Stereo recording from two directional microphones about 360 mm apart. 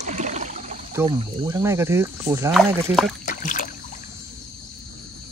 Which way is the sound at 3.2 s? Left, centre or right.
Left.